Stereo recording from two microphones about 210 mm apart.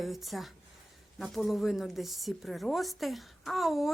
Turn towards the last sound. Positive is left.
turn(degrees=0)  # may be behind; listen again after turning